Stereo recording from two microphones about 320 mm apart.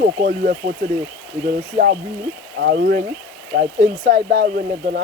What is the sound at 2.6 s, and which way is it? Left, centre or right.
Speech, right.